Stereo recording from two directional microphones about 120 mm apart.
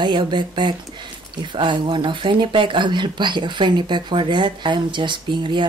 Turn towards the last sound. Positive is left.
turn(degrees=-40)  # may be behind; listen again after turning